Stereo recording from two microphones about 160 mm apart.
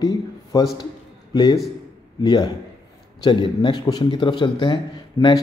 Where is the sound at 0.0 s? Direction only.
25° left (ahead or behind).